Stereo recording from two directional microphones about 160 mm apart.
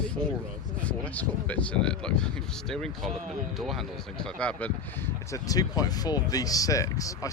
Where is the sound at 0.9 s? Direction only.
10° left (ahead or behind).